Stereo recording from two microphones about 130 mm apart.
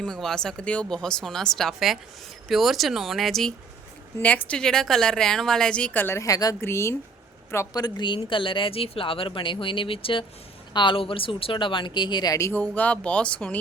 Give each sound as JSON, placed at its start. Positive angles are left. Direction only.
{"t": 0.0, "sound": "a woman's voice", "side_deg": 5}